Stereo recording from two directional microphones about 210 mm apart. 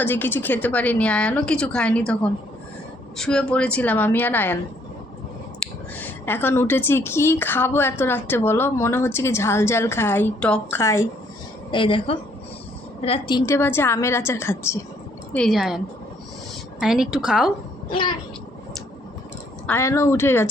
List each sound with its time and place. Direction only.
0.0 s speech: 10° left (ahead or behind)
3.2 s speech: 5° left (ahead or behind)
5.5 s speech: 10° left (ahead or behind)
11.7 s a woman's voice: 25° left (ahead or behind)
15.3 s a woman's voice: centre (ahead or behind)
16.8 s a woman's voice: centre (ahead or behind)
19.6 s speech: 10° left (ahead or behind)